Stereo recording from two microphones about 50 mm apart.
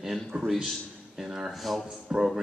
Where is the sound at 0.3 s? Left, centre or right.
Right.